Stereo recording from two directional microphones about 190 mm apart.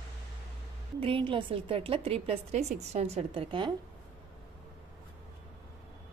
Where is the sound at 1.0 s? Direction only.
30° right (ahead or behind).